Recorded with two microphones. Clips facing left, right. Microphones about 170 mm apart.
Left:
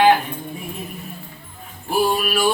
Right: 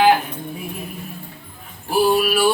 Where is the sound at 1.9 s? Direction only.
5° right (ahead or behind).